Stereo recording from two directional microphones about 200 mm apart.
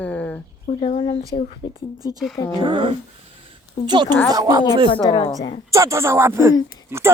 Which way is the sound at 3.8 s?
25° left (ahead or behind).